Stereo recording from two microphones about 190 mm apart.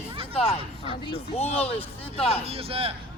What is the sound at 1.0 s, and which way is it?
Speech, 30° left (ahead or behind).